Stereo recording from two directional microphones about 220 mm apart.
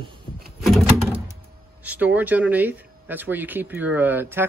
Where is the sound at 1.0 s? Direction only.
10° right (ahead or behind).